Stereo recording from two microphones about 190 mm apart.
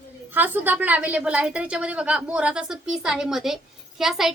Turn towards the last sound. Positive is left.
turn(degrees=0)  # may be behind; listen again after turning